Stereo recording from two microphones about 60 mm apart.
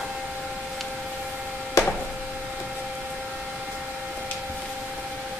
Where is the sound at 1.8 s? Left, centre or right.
Left.